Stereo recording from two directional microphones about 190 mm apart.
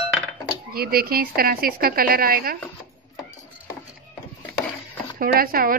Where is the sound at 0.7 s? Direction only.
50° right (ahead or behind).